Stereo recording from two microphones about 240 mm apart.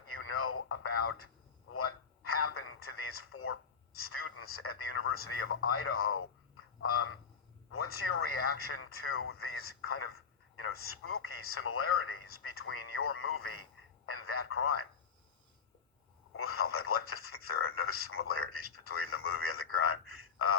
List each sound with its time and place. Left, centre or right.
0.1 s radio: left
1.7 s a sound: left
4.0 s speech: left
16.3 s speech: left